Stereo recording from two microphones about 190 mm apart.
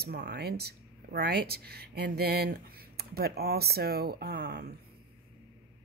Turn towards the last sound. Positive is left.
turn(degrees=-55)  # may be behind; listen again after turning